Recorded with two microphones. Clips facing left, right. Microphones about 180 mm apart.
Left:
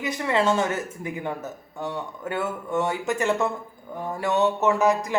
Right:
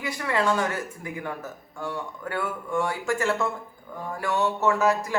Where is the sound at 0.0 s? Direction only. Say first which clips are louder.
Left 3 dB; 20° left (ahead or behind).